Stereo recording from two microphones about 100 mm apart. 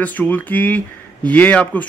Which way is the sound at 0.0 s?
15° left (ahead or behind).